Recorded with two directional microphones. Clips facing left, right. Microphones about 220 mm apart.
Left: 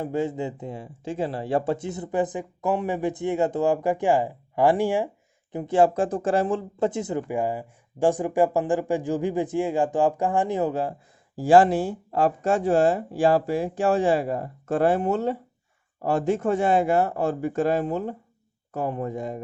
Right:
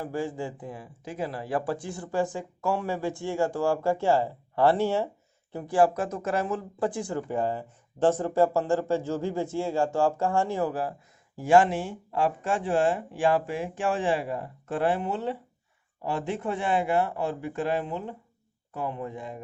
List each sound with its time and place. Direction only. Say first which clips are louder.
0.0 s speech: left 5 dB; 20° left (ahead or behind); by 19.4 s 40° left (ahead or behind)